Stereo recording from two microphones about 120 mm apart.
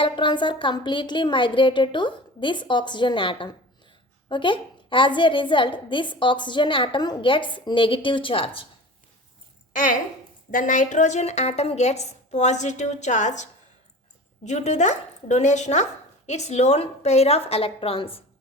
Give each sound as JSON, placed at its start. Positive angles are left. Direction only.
{"t": 0.0, "sound": "a woman's voice", "side_deg": 40}
{"t": 10.5, "sound": "speech", "side_deg": 90}
{"t": 14.4, "sound": "speech", "side_deg": 70}